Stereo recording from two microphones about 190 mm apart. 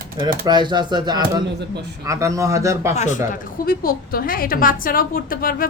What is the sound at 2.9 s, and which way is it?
Speech, 35° left (ahead or behind).